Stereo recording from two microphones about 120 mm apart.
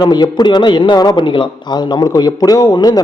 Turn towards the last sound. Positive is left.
turn(degrees=35)  # may be behind; listen again after turning